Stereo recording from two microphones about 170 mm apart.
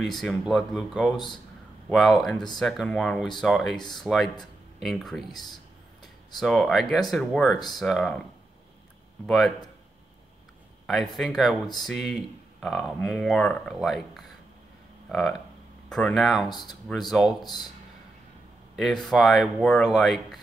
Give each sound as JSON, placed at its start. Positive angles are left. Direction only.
{"t": 0.0, "sound": "speech", "side_deg": 0}
{"t": 5.3, "sound": "speech", "side_deg": 25}
{"t": 6.3, "sound": "speech", "side_deg": 0}
{"t": 9.2, "sound": "speech", "side_deg": 0}
{"t": 10.9, "sound": "speech", "side_deg": 0}
{"t": 18.8, "sound": "speech", "side_deg": 0}